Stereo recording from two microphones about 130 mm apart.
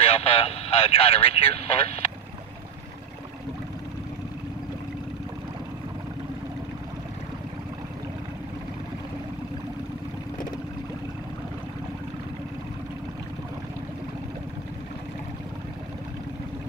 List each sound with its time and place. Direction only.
0.0 s speech: 50° left (ahead or behind)